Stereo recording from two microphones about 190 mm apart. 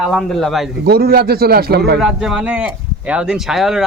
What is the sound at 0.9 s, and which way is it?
A man's voice, 55° right (ahead or behind).